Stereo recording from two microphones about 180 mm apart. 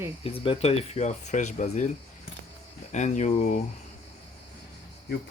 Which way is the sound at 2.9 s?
40° left (ahead or behind).